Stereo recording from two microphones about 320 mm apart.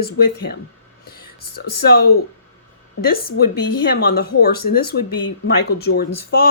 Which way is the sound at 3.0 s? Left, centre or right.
Left.